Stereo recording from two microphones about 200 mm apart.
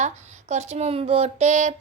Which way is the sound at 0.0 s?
35° right (ahead or behind).